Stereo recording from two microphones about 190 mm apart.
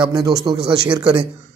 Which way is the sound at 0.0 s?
20° right (ahead or behind).